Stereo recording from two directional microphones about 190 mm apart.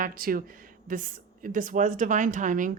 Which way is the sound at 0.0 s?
50° right (ahead or behind).